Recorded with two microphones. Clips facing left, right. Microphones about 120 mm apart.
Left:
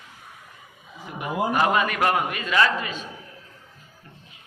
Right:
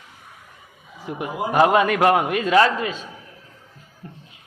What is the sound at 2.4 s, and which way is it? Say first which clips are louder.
Speech: right 5 dB; 35° right (ahead or behind).